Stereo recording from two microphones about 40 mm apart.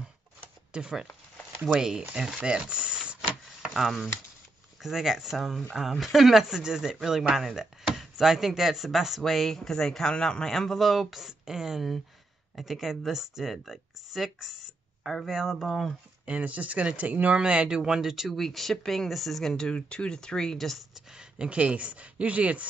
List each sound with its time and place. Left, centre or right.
0.7 s speech: right
3.7 s speech: centre
9.7 s speech: centre
10.1 s speech: left
10.4 s speech: centre
12.5 s speech: centre
15.6 s speech: centre
16.3 s speech: right
17.4 s speech: right; by 18.3 s centre
18.3 s speech: centre
19.7 s speech: left
20.5 s speech: centre
20.9 s speech: right